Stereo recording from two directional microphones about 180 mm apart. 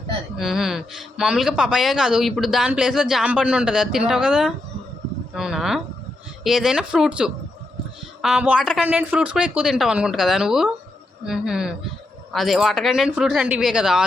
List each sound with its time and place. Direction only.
0.3 s speech: centre (ahead or behind)